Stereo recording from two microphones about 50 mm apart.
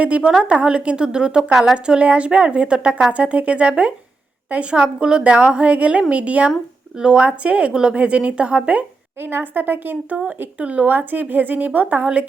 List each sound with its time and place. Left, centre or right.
0.0 s a woman's voice: right
4.8 s speech: centre
9.2 s speech: right
10.6 s a woman's voice: right